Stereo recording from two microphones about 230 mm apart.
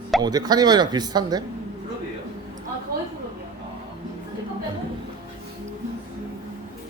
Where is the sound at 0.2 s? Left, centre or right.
Centre.